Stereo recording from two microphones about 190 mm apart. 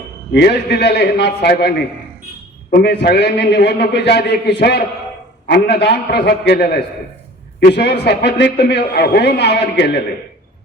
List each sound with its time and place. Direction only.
0.3 s a man's voice: 60° left (ahead or behind)
2.8 s a man's voice: 65° left (ahead or behind)